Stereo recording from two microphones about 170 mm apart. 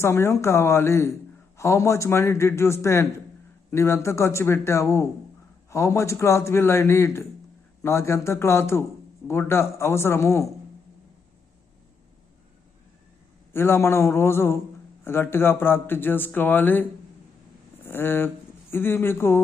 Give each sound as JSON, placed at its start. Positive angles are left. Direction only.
{"t": 0.0, "sound": "speech", "side_deg": 15}
{"t": 13.5, "sound": "speech", "side_deg": 15}
{"t": 17.8, "sound": "speech", "side_deg": 15}